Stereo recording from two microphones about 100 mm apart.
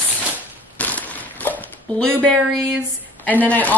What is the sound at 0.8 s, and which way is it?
Crushing, 15° left (ahead or behind).